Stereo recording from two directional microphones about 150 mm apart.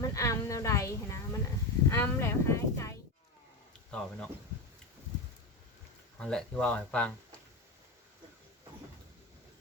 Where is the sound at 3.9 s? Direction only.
5° left (ahead or behind).